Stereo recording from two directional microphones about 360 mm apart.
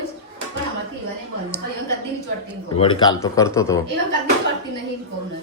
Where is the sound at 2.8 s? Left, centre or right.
Centre.